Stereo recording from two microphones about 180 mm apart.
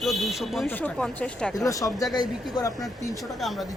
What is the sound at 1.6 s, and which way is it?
Speech, 20° left (ahead or behind).